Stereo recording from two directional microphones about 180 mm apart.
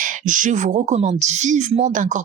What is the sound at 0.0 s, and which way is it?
A woman's voice, 45° right (ahead or behind).